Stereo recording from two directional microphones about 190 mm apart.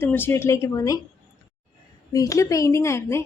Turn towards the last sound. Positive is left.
turn(degrees=15)  # may be behind; listen again after turning